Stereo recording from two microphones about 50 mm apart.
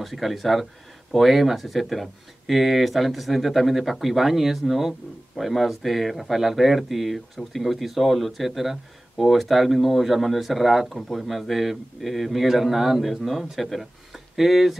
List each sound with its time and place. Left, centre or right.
0.0 s speech: centre